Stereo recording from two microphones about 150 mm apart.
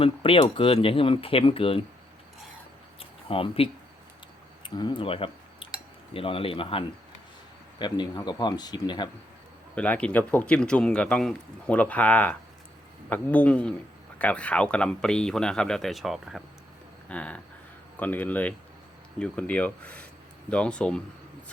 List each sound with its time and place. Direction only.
0.0 s speech: 35° left (ahead or behind)
3.0 s a sound: 40° left (ahead or behind)
4.6 s speech: 30° left (ahead or behind)
9.7 s speech: 10° left (ahead or behind)